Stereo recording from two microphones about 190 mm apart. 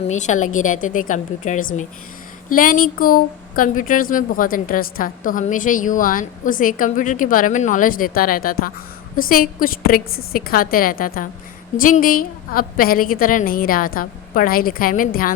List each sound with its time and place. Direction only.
0.1 s a woman's voice: 40° left (ahead or behind)